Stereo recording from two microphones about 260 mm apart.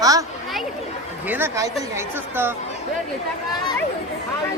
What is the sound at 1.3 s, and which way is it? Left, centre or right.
Speech, centre.